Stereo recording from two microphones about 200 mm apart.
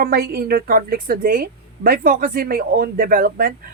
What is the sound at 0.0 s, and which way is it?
A woman's voice, 50° right (ahead or behind).